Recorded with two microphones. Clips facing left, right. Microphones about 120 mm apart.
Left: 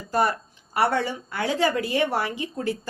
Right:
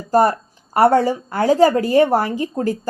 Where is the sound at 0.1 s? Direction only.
40° right (ahead or behind).